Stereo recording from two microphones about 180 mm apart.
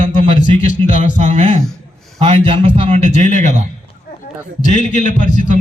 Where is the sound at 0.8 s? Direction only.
40° right (ahead or behind).